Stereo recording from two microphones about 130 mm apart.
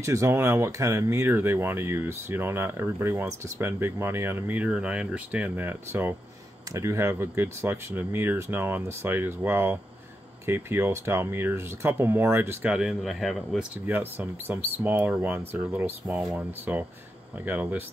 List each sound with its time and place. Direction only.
0.0 s speech: 20° right (ahead or behind)
12.7 s speech: centre (ahead or behind)
13.8 s speech: 15° right (ahead or behind)